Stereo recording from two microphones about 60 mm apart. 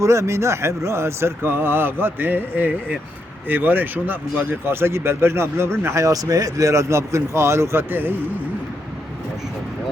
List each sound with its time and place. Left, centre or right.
0.0 s speech: right
6.0 s speech: right